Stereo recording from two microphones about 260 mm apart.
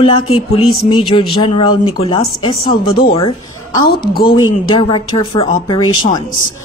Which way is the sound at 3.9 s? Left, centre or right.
Left.